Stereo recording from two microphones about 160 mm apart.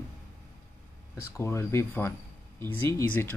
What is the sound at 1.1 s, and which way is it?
Speech, 15° left (ahead or behind).